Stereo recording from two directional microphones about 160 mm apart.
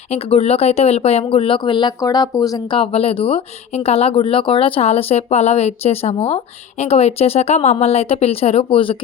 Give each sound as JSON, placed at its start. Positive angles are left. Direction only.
{"t": 0.1, "sound": "speech", "side_deg": 40}
{"t": 2.7, "sound": "speech", "side_deg": 35}